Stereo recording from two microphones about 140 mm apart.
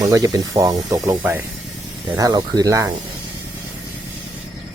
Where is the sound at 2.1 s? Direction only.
30° right (ahead or behind).